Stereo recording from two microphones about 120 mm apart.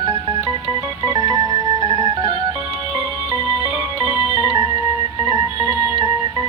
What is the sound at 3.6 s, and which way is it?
Music, 30° right (ahead or behind).